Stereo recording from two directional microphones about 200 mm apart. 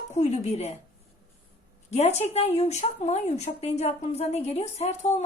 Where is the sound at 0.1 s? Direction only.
35° left (ahead or behind).